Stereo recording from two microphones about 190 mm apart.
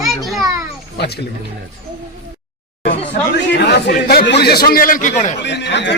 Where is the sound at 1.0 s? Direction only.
60° left (ahead or behind).